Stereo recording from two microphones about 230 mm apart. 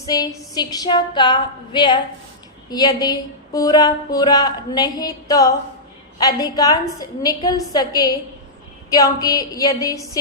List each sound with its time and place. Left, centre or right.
0.0 s a woman's voice: centre